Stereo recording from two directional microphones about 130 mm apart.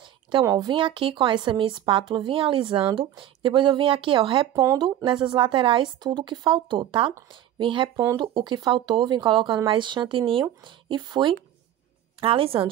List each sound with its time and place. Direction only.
0.4 s speech: 25° right (ahead or behind)
7.9 s speech: 20° right (ahead or behind)
8.2 s speech: 35° right (ahead or behind)
12.2 s a woman's voice: 45° right (ahead or behind)